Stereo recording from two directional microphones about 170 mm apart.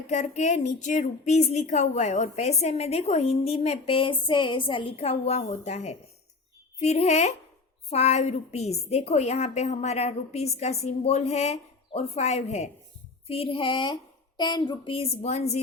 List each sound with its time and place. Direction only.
0.1 s a woman's voice: 45° left (ahead or behind)